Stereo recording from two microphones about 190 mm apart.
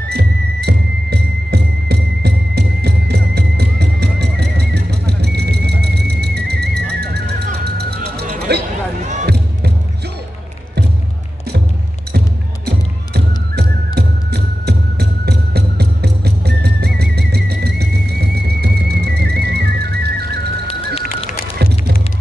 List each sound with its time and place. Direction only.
0.1 s music: 55° right (ahead or behind)
8.5 s a sound: 60° right (ahead or behind)
9.2 s music: 60° right (ahead or behind)
12.6 s music: 60° right (ahead or behind)
20.6 s music: 30° left (ahead or behind)